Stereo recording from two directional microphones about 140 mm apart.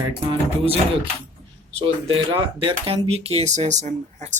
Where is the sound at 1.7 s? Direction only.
40° right (ahead or behind).